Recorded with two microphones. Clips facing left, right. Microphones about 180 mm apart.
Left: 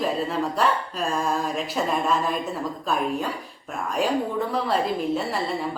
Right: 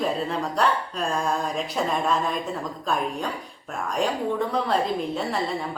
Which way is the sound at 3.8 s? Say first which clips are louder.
Left 1 dB; 5° left (ahead or behind).